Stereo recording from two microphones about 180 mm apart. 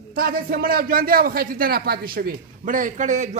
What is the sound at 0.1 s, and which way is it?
A man's voice, 55° right (ahead or behind).